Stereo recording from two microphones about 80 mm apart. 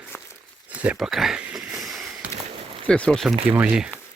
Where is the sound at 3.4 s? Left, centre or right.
Centre.